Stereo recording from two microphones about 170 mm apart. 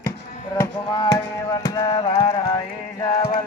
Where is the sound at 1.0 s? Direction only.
25° left (ahead or behind).